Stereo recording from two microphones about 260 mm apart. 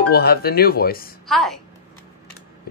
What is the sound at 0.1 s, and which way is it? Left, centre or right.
Speech, left.